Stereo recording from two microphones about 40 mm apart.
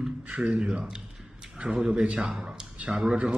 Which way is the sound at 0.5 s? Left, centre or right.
Right.